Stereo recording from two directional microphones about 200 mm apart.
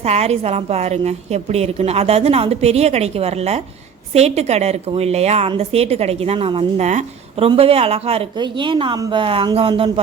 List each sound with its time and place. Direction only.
0.0 s a woman's voice: 30° right (ahead or behind)